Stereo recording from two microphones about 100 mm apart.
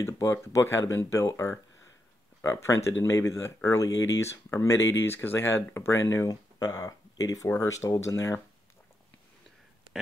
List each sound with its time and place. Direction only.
0.0 s speech: 30° left (ahead or behind)